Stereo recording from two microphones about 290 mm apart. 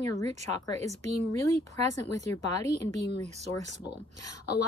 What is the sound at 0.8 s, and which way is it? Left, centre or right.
Speech, right.